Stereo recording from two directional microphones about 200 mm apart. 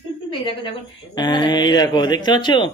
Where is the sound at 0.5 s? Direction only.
25° left (ahead or behind).